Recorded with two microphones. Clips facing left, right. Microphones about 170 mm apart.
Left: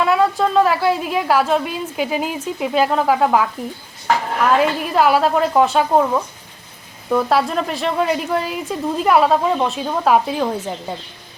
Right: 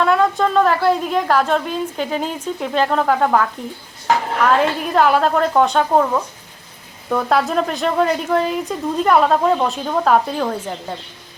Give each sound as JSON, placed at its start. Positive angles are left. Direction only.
{"t": 0.0, "sound": "a woman's voice", "side_deg": 5}